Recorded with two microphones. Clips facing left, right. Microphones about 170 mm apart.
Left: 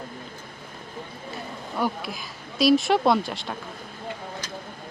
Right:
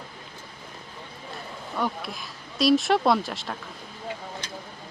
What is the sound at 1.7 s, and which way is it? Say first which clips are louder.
Speech: left 2 dB; centre (ahead or behind).